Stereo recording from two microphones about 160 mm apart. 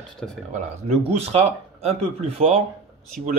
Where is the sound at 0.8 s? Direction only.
40° right (ahead or behind).